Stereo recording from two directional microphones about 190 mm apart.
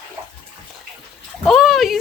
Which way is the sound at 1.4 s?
Centre (ahead or behind).